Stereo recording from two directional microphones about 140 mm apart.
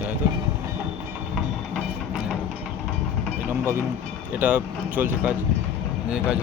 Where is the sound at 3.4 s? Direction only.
15° right (ahead or behind).